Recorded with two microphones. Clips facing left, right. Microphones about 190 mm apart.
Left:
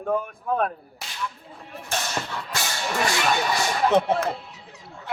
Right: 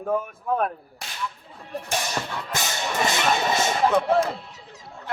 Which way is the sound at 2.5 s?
20° right (ahead or behind).